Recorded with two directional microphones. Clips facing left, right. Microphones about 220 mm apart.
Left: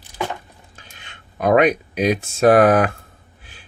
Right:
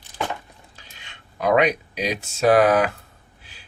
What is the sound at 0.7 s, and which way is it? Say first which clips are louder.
Speech: left 3 dB; 50° left (ahead or behind).